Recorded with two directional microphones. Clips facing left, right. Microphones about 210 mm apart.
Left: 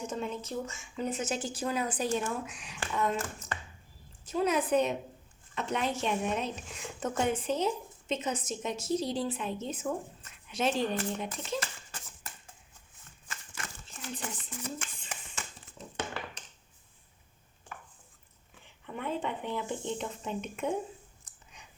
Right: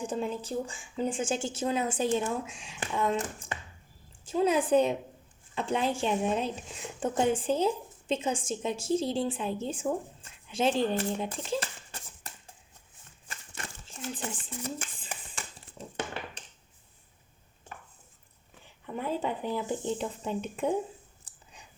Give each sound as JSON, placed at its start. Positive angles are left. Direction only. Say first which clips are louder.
{"t": 0.1, "sound": "a woman's voice", "louder": "right 3 dB", "side_deg": -35}
{"t": 13.3, "sound": "crumpling", "louder": "right 1 dB", "side_deg": -30}
{"t": 18.9, "sound": "speech", "louder": "right 3 dB", "side_deg": -35}
{"t": 21.3, "sound": "a sound", "louder": "right 2 dB", "side_deg": -35}